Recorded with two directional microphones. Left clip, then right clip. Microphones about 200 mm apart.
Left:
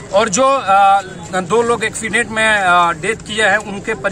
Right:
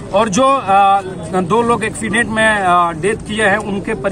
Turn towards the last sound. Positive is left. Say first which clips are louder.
# right 1 dB
turn(degrees=15)  # may be behind; listen again after turning